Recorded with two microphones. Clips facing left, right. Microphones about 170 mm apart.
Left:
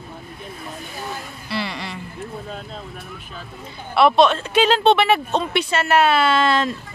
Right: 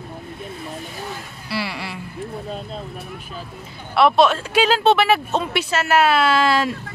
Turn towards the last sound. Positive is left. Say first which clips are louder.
# even
turn(degrees=-5)  # may be behind; listen again after turning